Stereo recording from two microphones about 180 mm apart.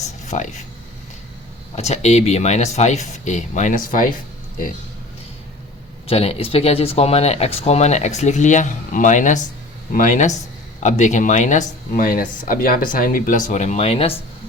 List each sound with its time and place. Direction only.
0.3 s speech: 40° left (ahead or behind)
1.7 s speech: 40° left (ahead or behind)
6.1 s speech: 35° left (ahead or behind)